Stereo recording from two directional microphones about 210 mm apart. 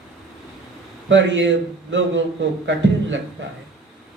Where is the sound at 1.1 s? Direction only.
60° right (ahead or behind).